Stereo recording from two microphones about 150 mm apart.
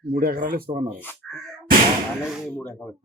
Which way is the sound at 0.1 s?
90° right.